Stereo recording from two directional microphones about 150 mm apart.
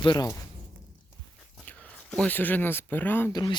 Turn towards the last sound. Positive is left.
turn(degrees=25)  # may be behind; listen again after turning